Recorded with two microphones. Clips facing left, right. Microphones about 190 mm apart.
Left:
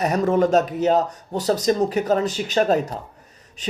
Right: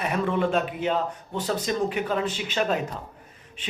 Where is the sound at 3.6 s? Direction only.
40° left (ahead or behind).